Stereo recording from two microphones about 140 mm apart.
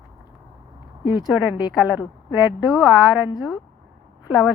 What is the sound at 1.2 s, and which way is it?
A woman's voice, 10° right (ahead or behind).